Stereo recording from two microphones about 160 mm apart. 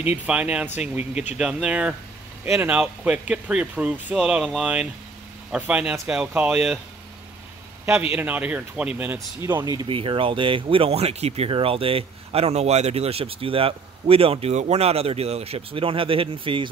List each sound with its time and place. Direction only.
0.3 s speech: 5° right (ahead or behind)
8.1 s speech: 10° right (ahead or behind)
9.8 s speech: 35° right (ahead or behind)